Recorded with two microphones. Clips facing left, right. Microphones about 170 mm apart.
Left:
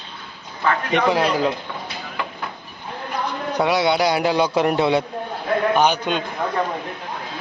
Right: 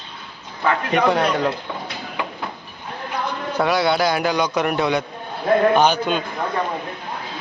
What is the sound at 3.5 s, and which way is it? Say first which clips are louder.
Speech: even; 20° left (ahead or behind).